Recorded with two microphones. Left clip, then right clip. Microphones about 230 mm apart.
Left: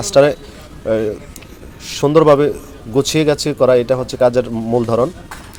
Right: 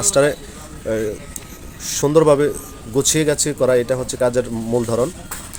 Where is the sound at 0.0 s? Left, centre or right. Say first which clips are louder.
Left 5 dB; centre.